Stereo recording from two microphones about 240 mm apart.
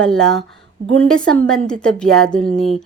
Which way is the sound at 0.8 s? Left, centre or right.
Right.